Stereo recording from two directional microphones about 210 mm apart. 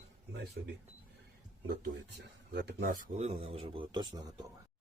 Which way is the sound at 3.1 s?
30° right (ahead or behind).